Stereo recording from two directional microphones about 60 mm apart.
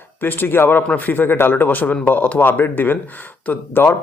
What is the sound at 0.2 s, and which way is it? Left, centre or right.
Speech, left.